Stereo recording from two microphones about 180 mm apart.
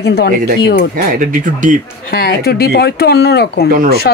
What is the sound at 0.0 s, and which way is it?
Speech, 65° left (ahead or behind).